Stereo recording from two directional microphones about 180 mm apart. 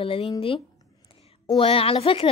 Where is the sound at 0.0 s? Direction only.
30° left (ahead or behind).